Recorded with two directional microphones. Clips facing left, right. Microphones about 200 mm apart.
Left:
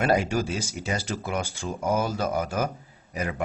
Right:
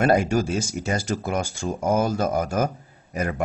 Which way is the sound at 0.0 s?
50° right (ahead or behind).